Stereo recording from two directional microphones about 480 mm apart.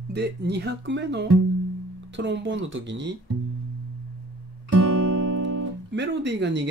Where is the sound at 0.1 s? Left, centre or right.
Right.